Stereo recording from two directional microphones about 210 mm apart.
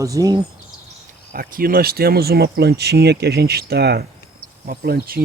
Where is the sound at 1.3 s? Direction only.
45° right (ahead or behind).